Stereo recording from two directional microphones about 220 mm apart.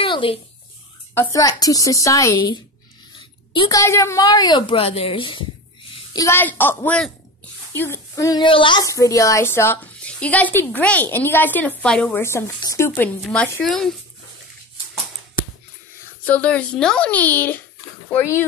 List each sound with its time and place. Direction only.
0.0 s a sound: 25° left (ahead or behind)
1.1 s a child's voice: 10° left (ahead or behind)
3.5 s a woman's voice: 15° left (ahead or behind); by 13.9 s centre (ahead or behind)
16.3 s a child's voice: 5° left (ahead or behind)